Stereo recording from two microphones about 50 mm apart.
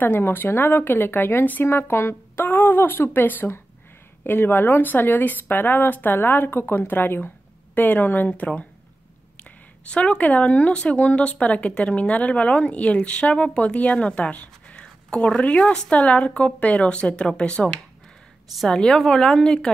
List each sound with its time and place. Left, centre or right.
0.0 s speech: left
14.8 s a woman's voice: centre